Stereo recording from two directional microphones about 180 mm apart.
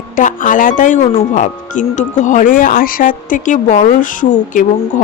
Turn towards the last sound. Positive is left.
turn(degrees=45)  # may be behind; listen again after turning